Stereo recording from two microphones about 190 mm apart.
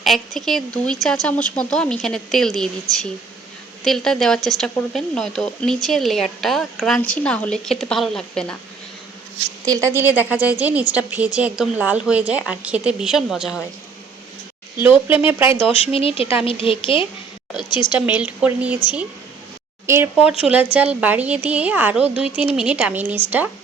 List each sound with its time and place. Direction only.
0.0 s speech: centre (ahead or behind)
3.8 s speech: centre (ahead or behind)
9.6 s a woman's voice: 15° right (ahead or behind)
14.8 s a woman's voice: 10° right (ahead or behind)
15.9 s a woman's voice: 30° left (ahead or behind)
17.9 s a woman's voice: 10° right (ahead or behind)
19.9 s a woman's voice: 10° right (ahead or behind)